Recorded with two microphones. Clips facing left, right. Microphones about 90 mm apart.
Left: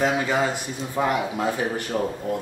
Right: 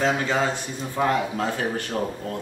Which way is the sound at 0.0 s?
10° left (ahead or behind).